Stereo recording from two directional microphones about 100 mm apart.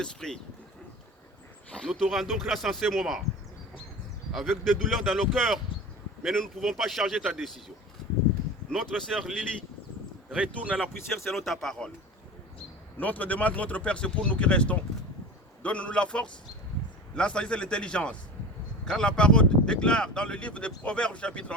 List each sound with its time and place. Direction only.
0.0 s speech: 5° left (ahead or behind)
1.7 s speech: 5° left (ahead or behind)
4.3 s speech: centre (ahead or behind)
8.7 s speech: 5° left (ahead or behind)
10.2 s speech: 15° right (ahead or behind); by 11.9 s 5° left (ahead or behind)
13.0 s speech: 15° left (ahead or behind)